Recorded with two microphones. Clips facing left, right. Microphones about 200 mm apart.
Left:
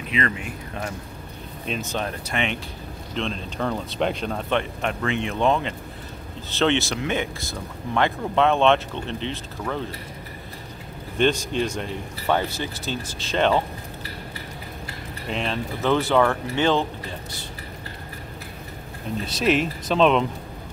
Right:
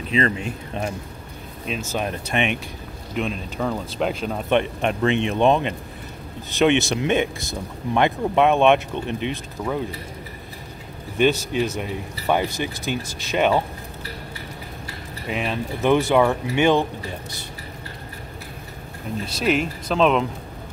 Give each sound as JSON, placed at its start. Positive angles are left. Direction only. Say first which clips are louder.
{"t": 0.1, "sound": "speech", "louder": "right 4 dB", "side_deg": -30}
{"t": 1.7, "sound": "speech", "louder": "right 1 dB", "side_deg": -5}
{"t": 2.0, "sound": "speech", "louder": "right 3 dB", "side_deg": -15}
{"t": 3.2, "sound": "speech", "louder": "right 2 dB", "side_deg": -5}
{"t": 4.5, "sound": "speech", "louder": "right 6 dB", "side_deg": -20}
{"t": 11.1, "sound": "speech", "louder": "right 2 dB", "side_deg": -10}
{"t": 15.2, "sound": "speech", "louder": "right 2 dB", "side_deg": -10}
{"t": 19.2, "sound": "speech", "louder": "even", "side_deg": 0}